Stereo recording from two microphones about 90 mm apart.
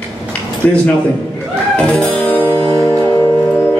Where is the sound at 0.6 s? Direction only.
15° left (ahead or behind).